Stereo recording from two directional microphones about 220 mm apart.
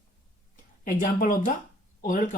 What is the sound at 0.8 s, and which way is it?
Speech, 40° left (ahead or behind).